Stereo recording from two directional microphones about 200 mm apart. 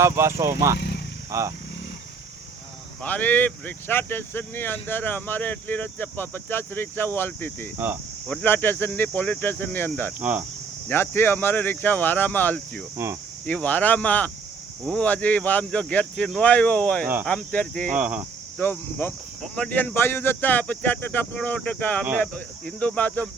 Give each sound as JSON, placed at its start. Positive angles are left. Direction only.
{"t": 0.0, "sound": "speech", "side_deg": -15}
{"t": 0.8, "sound": "vehicle", "side_deg": 55}
{"t": 1.3, "sound": "speech", "side_deg": -15}
{"t": 3.0, "sound": "speech", "side_deg": 10}
{"t": 10.2, "sound": "speech", "side_deg": -10}
{"t": 10.8, "sound": "speech", "side_deg": 10}
{"t": 17.9, "sound": "speech", "side_deg": -5}
{"t": 18.5, "sound": "speech", "side_deg": 10}